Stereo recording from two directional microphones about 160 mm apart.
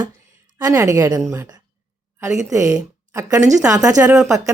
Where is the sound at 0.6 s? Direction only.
20° right (ahead or behind).